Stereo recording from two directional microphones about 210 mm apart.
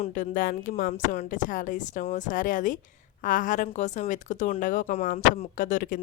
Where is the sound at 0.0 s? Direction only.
40° left (ahead or behind).